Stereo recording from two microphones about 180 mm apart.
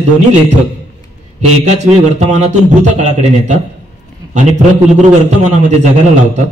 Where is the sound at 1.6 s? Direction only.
40° right (ahead or behind).